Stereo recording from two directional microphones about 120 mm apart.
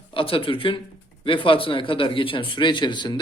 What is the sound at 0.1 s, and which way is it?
Speech, 50° left (ahead or behind).